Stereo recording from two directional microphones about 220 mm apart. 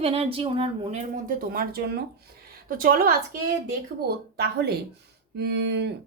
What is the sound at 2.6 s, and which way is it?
Speech, 40° right (ahead or behind).